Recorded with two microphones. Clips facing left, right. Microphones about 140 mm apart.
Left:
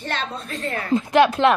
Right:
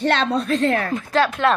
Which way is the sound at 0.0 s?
75° right (ahead or behind).